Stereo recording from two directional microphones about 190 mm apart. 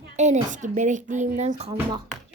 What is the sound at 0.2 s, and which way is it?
A woman's voice, 40° right (ahead or behind).